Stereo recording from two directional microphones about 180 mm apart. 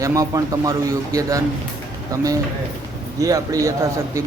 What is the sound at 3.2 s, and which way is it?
A man's voice, 20° right (ahead or behind).